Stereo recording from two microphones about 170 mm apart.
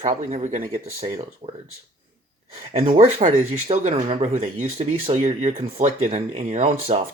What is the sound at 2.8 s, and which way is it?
Speech, 40° right (ahead or behind).